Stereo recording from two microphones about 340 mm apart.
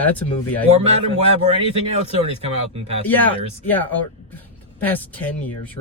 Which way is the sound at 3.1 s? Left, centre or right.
Centre.